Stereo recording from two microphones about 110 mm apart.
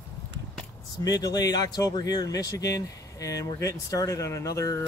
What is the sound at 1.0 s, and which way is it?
Speech, 35° left (ahead or behind).